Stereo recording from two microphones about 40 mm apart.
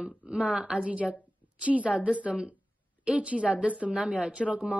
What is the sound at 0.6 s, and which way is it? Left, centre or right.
Speech, centre.